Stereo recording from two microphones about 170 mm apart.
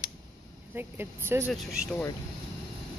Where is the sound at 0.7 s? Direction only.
15° right (ahead or behind).